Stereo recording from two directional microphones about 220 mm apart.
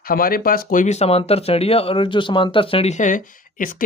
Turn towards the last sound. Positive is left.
turn(degrees=40)  # may be behind; listen again after turning